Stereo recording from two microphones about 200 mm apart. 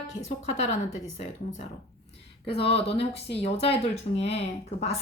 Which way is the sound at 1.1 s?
35° left (ahead or behind).